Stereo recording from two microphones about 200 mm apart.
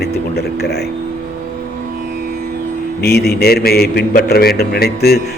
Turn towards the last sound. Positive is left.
turn(degrees=50)  # may be behind; listen again after turning